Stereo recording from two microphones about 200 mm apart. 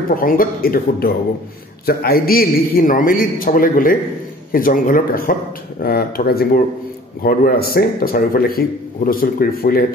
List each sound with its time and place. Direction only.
0.1 s a man's voice: 45° left (ahead or behind)